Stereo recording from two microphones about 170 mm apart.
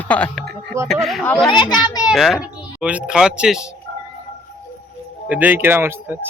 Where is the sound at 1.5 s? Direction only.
25° left (ahead or behind).